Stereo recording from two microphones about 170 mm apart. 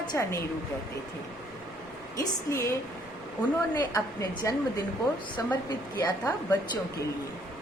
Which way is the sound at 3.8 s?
20° left (ahead or behind).